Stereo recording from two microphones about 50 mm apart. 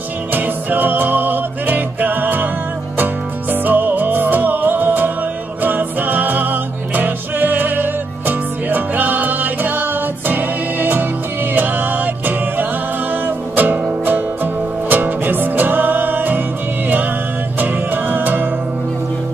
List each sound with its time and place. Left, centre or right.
0.3 s music: right
3.6 s music: right
17.6 s music: right